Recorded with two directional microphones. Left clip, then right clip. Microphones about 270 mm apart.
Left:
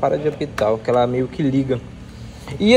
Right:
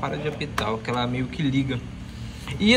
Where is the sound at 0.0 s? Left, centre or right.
Centre.